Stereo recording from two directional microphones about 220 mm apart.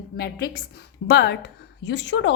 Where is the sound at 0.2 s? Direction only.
45° left (ahead or behind).